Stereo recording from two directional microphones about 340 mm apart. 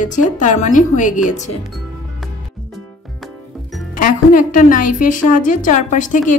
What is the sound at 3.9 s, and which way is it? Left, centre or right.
A woman's voice, left.